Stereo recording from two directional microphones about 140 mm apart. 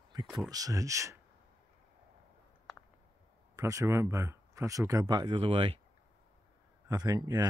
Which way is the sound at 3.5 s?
20° right (ahead or behind).